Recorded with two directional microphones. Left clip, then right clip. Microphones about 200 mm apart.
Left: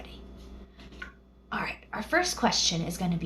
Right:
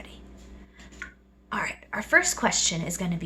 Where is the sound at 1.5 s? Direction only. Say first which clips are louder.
Right 3 dB; 50° right (ahead or behind).